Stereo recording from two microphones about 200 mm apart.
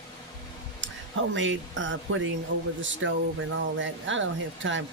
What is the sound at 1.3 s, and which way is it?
Speech, 70° right (ahead or behind).